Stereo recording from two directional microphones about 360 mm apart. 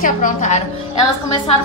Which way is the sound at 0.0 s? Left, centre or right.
Left.